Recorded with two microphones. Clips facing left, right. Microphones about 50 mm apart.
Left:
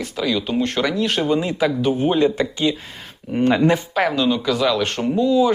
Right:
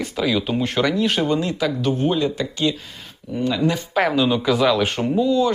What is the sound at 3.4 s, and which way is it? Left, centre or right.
Speech, left.